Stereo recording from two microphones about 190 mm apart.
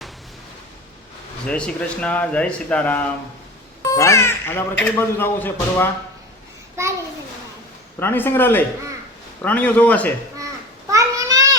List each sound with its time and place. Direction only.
1.5 s speech: 5° left (ahead or behind)
7.9 s speech: 10° left (ahead or behind)
10.9 s a sound: 20° right (ahead or behind)